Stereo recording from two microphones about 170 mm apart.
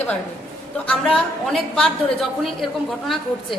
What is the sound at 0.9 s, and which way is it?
A woman's voice, 5° left (ahead or behind).